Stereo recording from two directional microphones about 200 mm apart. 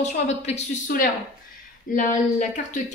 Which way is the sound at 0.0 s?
35° left (ahead or behind).